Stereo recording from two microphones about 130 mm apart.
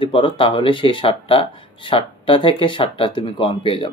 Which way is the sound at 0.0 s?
40° left (ahead or behind).